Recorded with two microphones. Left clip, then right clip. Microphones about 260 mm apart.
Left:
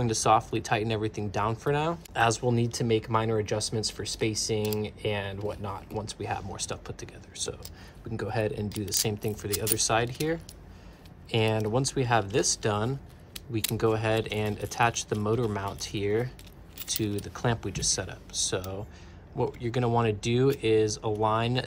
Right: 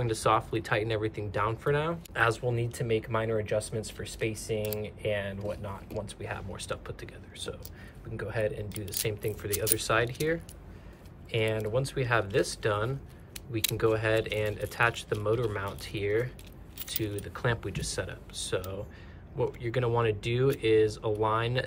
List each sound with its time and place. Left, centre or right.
0.0 s speech: centre